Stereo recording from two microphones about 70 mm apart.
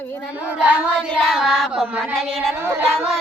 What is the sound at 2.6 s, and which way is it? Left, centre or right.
Child singing, right.